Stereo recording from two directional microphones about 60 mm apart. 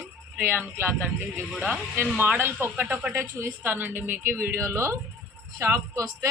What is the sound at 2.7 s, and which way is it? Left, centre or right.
Speech, right.